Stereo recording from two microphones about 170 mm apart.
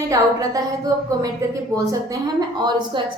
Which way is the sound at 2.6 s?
25° right (ahead or behind).